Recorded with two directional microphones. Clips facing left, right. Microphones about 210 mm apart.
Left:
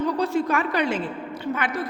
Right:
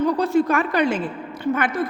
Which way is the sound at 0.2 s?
50° right (ahead or behind).